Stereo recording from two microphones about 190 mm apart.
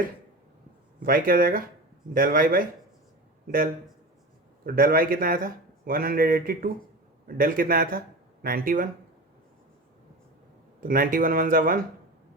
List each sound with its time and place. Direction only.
0.9 s a man's voice: 50° right (ahead or behind)
4.6 s a man's voice: 50° right (ahead or behind)
10.8 s a man's voice: 50° right (ahead or behind)